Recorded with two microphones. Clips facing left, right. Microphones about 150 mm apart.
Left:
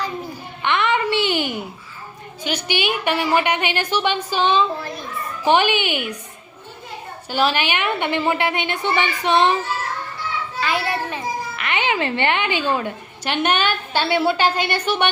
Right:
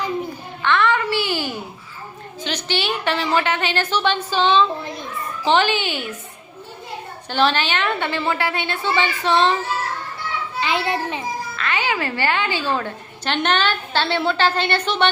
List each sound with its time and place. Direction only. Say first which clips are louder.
0.6 s a sound: right 1 dB; 20° left (ahead or behind)
2.4 s a woman's voice: left 2 dB; 10° left (ahead or behind)
7.3 s a woman's voice: right 1 dB; 10° left (ahead or behind)
10.6 s children playing: right 1 dB; 20° right (ahead or behind)
11.5 s a woman's voice: left 1 dB; 20° left (ahead or behind)